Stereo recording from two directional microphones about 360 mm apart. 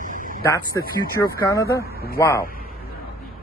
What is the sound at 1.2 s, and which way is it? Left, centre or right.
Speech, centre.